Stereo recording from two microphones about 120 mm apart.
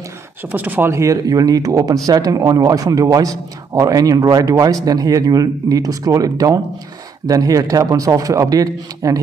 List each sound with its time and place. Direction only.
0.4 s speech: 15° right (ahead or behind); by 9.2 s 30° right (ahead or behind)